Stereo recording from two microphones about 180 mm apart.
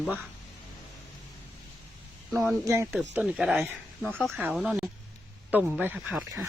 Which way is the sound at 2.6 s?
15° right (ahead or behind).